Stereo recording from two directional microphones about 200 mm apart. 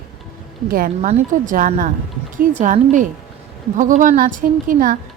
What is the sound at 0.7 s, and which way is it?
A woman's voice, 45° right (ahead or behind).